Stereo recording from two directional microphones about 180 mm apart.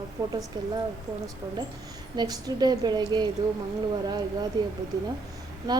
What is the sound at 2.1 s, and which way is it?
Speech, 20° right (ahead or behind).